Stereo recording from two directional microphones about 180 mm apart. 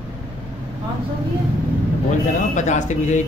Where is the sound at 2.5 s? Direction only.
45° left (ahead or behind).